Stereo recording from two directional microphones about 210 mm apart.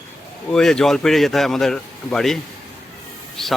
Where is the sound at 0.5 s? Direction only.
5° left (ahead or behind).